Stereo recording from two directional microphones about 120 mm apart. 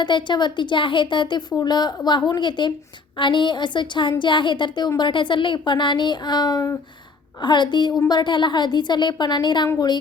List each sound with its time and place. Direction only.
0.0 s speech: 40° left (ahead or behind)